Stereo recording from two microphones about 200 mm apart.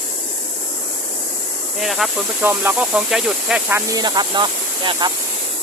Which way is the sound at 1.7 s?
Centre (ahead or behind).